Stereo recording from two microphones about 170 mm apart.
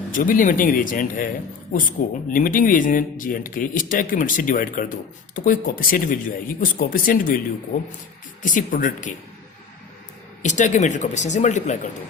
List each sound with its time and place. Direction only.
0.1 s speech: 50° left (ahead or behind)
10.4 s speech: 45° left (ahead or behind)